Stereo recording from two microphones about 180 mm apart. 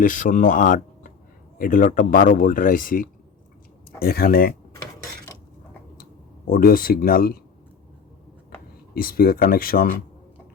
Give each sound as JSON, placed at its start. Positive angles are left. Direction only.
{"t": 0.0, "sound": "speech", "side_deg": 45}
{"t": 6.5, "sound": "speech", "side_deg": 55}
{"t": 9.0, "sound": "speech", "side_deg": 55}